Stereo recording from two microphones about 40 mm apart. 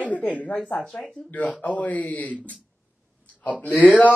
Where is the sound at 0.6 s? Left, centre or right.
Left.